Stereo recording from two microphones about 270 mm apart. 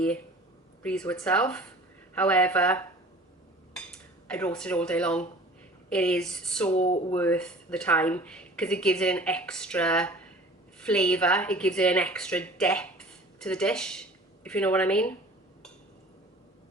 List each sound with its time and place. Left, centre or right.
0.8 s speech: centre
4.3 s speech: centre
6.7 s speech: left
7.1 s a woman's voice: centre